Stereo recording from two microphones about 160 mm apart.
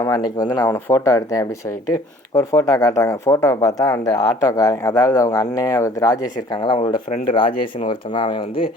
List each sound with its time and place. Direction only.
0.0 s speech: 25° left (ahead or behind)
0.7 s speech: 15° left (ahead or behind); by 8.6 s 30° left (ahead or behind)